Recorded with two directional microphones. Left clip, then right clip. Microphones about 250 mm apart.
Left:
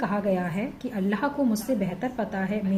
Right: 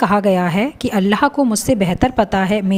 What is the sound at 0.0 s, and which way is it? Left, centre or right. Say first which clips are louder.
A woman's voice: right 12 dB; right.